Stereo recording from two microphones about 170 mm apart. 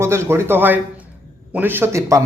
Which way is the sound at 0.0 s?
15° right (ahead or behind).